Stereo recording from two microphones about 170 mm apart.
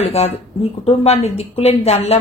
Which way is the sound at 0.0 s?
35° left (ahead or behind).